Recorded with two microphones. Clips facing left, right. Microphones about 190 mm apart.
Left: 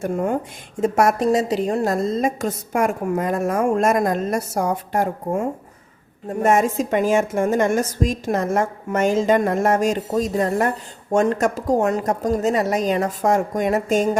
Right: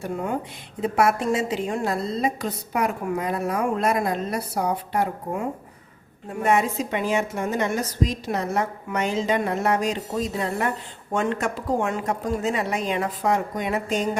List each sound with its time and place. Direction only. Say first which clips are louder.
0.0 s a woman's voice: left 5 dB; 50° left (ahead or behind)